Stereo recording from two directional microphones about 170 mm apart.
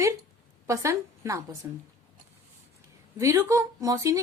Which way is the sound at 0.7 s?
15° right (ahead or behind).